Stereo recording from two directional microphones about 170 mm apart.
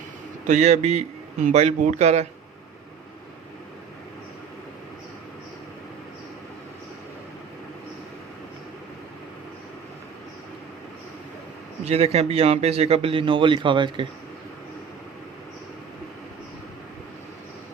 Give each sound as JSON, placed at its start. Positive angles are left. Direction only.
{"t": 0.4, "sound": "a man's voice", "side_deg": -45}
{"t": 11.9, "sound": "a man's voice", "side_deg": -40}